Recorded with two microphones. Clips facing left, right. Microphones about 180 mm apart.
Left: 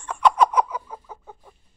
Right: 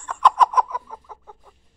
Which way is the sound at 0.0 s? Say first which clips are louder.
Even; 10° left (ahead or behind).